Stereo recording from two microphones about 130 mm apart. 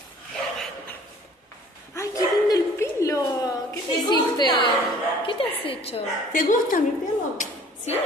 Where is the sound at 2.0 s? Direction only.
25° left (ahead or behind).